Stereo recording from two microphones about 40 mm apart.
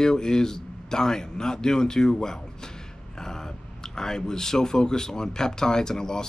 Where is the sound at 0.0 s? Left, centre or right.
Centre.